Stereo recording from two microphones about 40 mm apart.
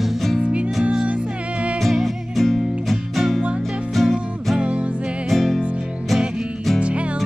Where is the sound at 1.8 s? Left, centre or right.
Centre.